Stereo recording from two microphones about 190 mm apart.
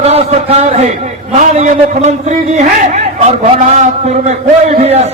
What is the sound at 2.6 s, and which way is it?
A man's voice, 35° right (ahead or behind).